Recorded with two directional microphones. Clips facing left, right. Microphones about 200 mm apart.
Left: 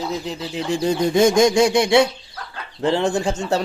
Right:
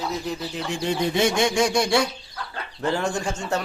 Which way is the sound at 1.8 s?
20° left (ahead or behind).